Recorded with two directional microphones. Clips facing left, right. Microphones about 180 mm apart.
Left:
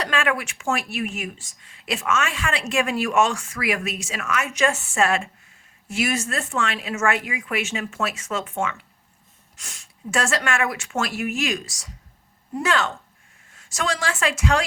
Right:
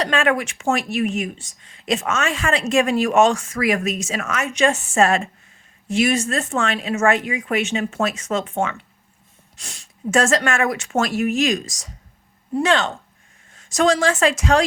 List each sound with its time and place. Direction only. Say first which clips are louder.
0.0 s speech: right 5 dB; 35° right (ahead or behind)